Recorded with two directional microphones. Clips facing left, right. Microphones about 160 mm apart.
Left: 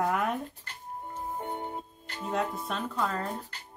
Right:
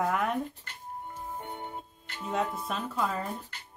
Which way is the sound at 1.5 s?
40° left (ahead or behind).